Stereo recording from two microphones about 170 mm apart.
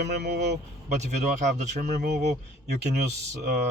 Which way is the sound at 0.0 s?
80° right.